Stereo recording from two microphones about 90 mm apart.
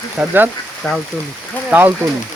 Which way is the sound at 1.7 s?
20° right (ahead or behind).